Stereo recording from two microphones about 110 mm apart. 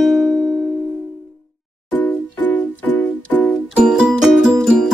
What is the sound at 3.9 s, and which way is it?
Music, 5° right (ahead or behind).